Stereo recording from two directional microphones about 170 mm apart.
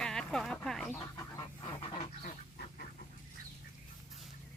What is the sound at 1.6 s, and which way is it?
Goose, 40° left (ahead or behind).